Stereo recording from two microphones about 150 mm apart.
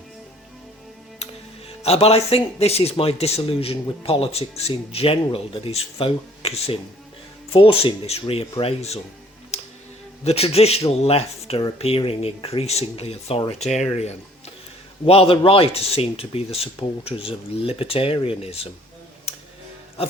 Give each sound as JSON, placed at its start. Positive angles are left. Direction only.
{"t": 1.8, "sound": "speech", "side_deg": 45}
{"t": 9.5, "sound": "music", "side_deg": 45}
{"t": 10.2, "sound": "speech", "side_deg": 45}